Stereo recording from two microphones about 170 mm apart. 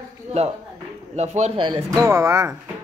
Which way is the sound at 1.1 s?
40° right (ahead or behind).